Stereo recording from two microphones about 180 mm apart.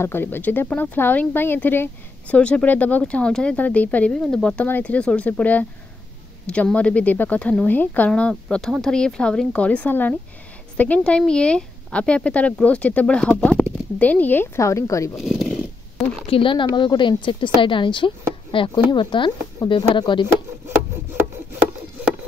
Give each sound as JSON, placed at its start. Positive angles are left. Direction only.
{"t": 0.0, "sound": "speech", "side_deg": 10}
{"t": 15.1, "sound": "speech", "side_deg": 0}
{"t": 16.3, "sound": "a woman's voice", "side_deg": 30}